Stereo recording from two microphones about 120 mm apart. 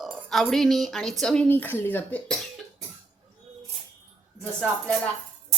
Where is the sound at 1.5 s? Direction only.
15° left (ahead or behind).